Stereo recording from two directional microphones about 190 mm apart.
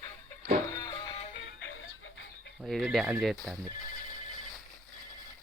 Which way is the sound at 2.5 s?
Centre (ahead or behind).